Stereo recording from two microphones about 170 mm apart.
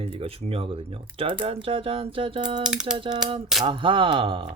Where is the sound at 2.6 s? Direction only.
5° right (ahead or behind).